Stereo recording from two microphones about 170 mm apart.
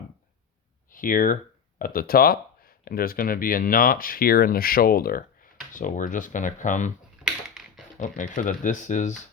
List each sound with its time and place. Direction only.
0.9 s speech: 55° left (ahead or behind)
7.3 s a sound: centre (ahead or behind)
7.9 s speech: 45° left (ahead or behind)